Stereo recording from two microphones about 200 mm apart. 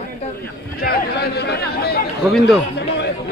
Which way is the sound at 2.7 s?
55° left (ahead or behind).